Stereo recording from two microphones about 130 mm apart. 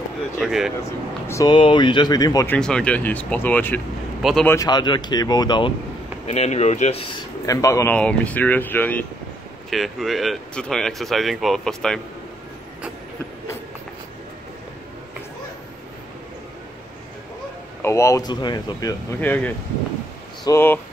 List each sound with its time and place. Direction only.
0.4 s speech: 5° right (ahead or behind)
1.2 s speech: 20° left (ahead or behind)
1.5 s speech: 40° left (ahead or behind)
2.4 s speech: 10° left (ahead or behind)
4.2 s speech: centre (ahead or behind)
4.6 s speech: 35° left (ahead or behind)
6.2 s speech: 55° left (ahead or behind)
7.4 s speech: 25° left (ahead or behind)
7.9 s speech: 10° left (ahead or behind)
9.7 s speech: centre (ahead or behind)
17.8 s speech: 20° left (ahead or behind)
19.2 s speech: 15° left (ahead or behind)
20.5 s speech: 15° left (ahead or behind)